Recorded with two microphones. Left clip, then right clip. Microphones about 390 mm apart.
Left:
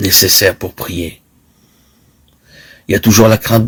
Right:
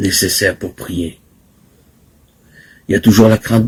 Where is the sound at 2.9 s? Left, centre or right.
Left.